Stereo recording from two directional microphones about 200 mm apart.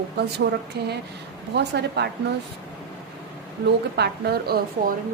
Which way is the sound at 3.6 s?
55° right (ahead or behind).